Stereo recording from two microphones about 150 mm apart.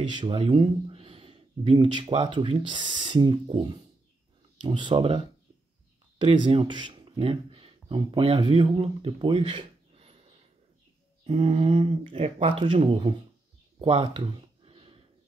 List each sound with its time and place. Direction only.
0.0 s speech: 30° right (ahead or behind)
11.2 s speech: 40° right (ahead or behind)
13.7 s a sound: 35° right (ahead or behind)